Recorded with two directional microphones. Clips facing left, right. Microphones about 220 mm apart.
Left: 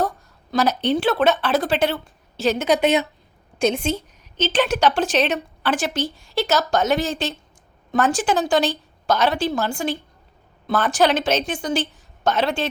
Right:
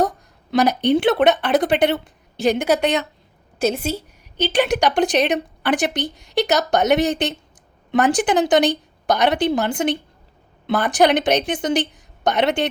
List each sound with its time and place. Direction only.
0.5 s a woman's voice: 15° right (ahead or behind)
2.7 s speech: 5° left (ahead or behind)
3.6 s a woman's voice: 5° right (ahead or behind)